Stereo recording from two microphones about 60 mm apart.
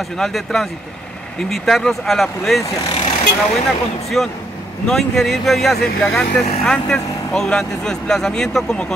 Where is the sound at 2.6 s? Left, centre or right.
Left.